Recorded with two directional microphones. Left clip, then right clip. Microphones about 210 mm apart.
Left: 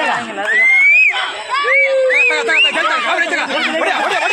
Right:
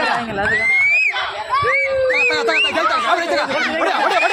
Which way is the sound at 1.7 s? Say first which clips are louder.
Left 8 dB; 50° right (ahead or behind).